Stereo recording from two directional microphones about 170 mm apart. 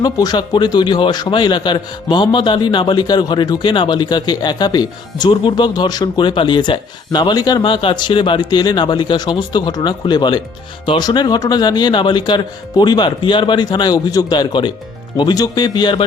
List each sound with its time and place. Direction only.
0.0 s a man's voice: 25° left (ahead or behind)